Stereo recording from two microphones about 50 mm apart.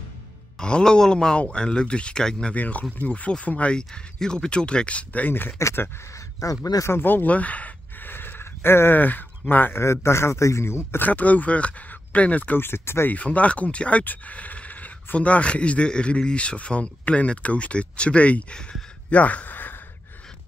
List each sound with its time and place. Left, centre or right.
0.6 s speech: centre
2.5 s speech: left
5.6 s speech: left
6.1 s speech: left
6.9 s speech: left
7.2 s gasp: left
8.1 s a sound: left
9.5 s speech: left
9.8 s a man's voice: left
11.0 s speech: left
12.5 s speech: left
13.1 s speech: left